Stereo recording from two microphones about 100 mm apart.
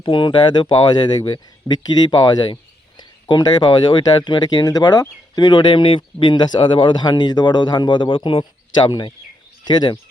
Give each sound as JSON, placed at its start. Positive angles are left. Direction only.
{"t": 0.0, "sound": "speech", "side_deg": 55}
{"t": 8.9, "sound": "speech", "side_deg": 45}